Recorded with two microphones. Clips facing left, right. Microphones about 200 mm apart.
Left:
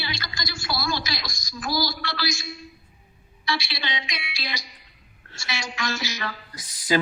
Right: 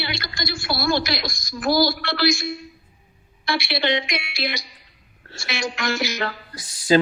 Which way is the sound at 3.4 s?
60° right (ahead or behind).